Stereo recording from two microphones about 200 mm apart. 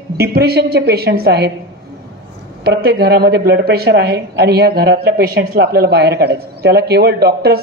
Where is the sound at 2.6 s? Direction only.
55° right (ahead or behind).